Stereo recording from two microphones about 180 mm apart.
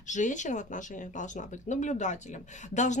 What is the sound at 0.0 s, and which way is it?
Speech, 45° left (ahead or behind).